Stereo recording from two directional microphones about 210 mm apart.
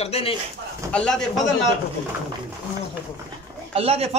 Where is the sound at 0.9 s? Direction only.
5° left (ahead or behind).